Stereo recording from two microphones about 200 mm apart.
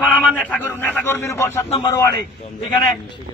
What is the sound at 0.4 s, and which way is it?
Speech, 10° left (ahead or behind).